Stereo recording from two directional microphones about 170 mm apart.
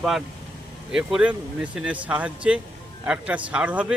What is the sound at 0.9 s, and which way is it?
Speech, 5° right (ahead or behind).